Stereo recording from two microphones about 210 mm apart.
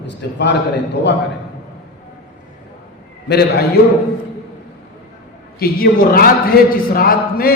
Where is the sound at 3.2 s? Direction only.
50° left (ahead or behind).